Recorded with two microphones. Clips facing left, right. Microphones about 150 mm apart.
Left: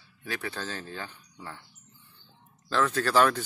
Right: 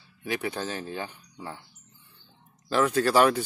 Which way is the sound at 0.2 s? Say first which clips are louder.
Right 5 dB; 20° right (ahead or behind).